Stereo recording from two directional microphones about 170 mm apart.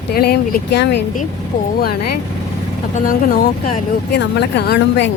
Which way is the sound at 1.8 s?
70° left (ahead or behind).